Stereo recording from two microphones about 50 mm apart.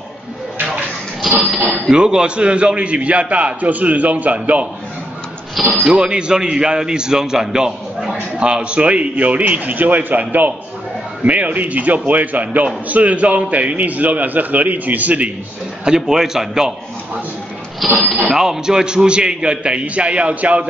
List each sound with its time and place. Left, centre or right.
1.7 s a man's voice: centre; by 4.6 s right
5.9 s a man's voice: centre
15.8 s a man's voice: centre
17.8 s speech: centre
18.1 s a man's voice: centre